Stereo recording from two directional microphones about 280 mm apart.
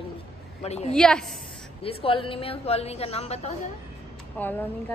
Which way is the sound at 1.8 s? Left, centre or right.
Centre.